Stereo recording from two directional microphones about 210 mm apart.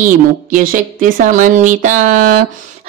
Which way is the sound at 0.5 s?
40° right (ahead or behind).